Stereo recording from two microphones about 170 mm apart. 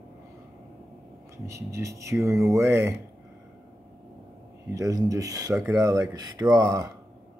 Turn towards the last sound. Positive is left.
turn(degrees=-20)  # may be behind; listen again after turning